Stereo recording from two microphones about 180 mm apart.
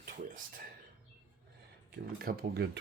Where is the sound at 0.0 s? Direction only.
50° right (ahead or behind).